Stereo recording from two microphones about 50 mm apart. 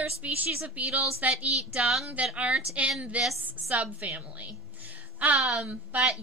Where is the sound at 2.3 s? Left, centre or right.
Right.